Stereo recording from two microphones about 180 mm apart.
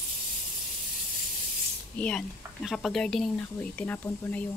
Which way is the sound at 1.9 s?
5° left (ahead or behind).